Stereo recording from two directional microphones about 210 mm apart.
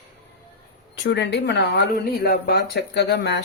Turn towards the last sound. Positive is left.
turn(degrees=55)  # may be behind; listen again after turning